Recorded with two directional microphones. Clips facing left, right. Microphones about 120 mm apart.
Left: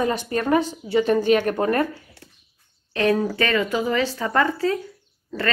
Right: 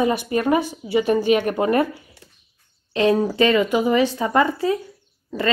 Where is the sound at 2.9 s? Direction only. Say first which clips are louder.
Right 3 dB; 15° right (ahead or behind).